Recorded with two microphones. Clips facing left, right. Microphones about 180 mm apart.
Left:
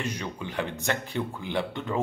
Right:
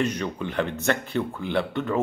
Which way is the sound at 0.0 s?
15° left (ahead or behind).